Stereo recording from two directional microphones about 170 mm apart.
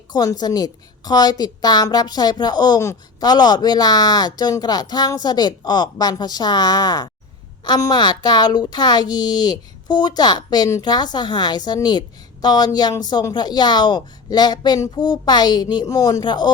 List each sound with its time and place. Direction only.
0.1 s a woman's voice: 25° left (ahead or behind)